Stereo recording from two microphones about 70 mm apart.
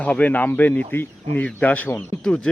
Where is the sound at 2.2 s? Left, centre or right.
Centre.